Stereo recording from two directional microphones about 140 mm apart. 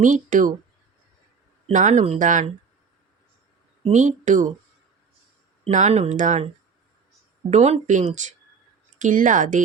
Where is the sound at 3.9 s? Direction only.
60° right (ahead or behind).